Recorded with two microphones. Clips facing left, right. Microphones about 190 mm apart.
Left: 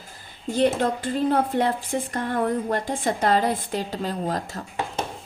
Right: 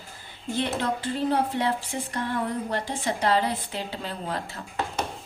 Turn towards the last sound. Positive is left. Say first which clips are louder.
# left 5 dB
turn(degrees=40)  # may be behind; listen again after turning